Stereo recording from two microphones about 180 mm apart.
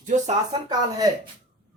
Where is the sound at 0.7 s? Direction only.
20° right (ahead or behind).